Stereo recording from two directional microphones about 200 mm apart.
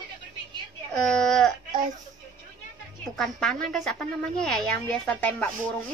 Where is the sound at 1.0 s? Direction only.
5° left (ahead or behind).